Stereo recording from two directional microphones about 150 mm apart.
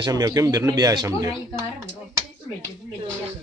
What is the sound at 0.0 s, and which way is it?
Speech, 25° right (ahead or behind).